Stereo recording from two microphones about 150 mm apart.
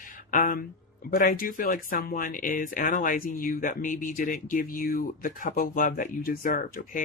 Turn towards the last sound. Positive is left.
turn(degrees=60)  # may be behind; listen again after turning